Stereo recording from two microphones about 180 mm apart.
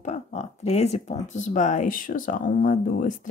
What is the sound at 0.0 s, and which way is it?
Speech, 40° left (ahead or behind).